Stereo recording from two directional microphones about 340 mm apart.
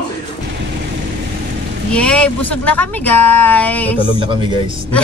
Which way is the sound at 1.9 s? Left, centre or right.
Centre.